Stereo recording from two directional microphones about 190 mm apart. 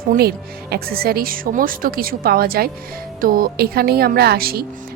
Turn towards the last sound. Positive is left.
turn(degrees=-55)  # may be behind; listen again after turning